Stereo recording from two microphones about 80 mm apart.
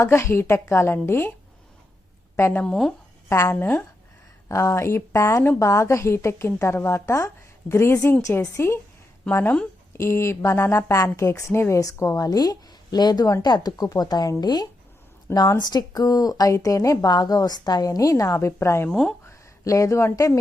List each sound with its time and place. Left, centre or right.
0.0 s a woman's voice: left
2.3 s a woman's voice: left
2.6 s speech: centre
3.2 s a woman's voice: left
3.6 s speech: left
4.4 s a woman's voice: left
18.3 s a woman's voice: left
18.9 s speech: centre
19.2 s speech: left